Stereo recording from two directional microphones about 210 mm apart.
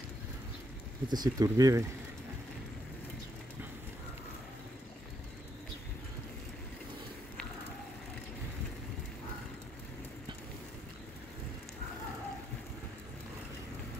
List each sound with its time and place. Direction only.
1.0 s speech: 20° right (ahead or behind)